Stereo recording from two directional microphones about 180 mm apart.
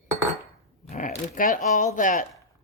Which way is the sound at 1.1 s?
45° left (ahead or behind).